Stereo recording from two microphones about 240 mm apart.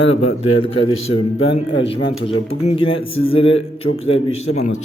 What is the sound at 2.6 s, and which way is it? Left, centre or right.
A man's voice, left.